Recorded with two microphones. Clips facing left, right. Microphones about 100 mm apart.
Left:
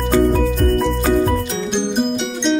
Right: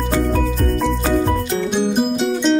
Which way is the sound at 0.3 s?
Centre (ahead or behind).